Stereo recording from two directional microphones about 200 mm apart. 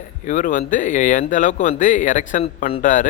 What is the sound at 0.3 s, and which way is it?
Speech, 40° left (ahead or behind).